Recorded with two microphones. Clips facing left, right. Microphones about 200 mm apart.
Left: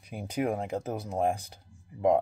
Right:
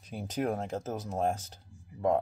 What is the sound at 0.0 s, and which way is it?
Speech, 10° left (ahead or behind).